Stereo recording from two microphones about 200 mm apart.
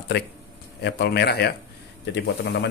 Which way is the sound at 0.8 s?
55° left (ahead or behind).